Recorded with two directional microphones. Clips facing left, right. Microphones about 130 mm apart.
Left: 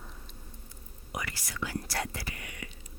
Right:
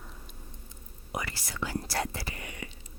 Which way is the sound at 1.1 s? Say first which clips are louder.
Right 2 dB; 30° right (ahead or behind).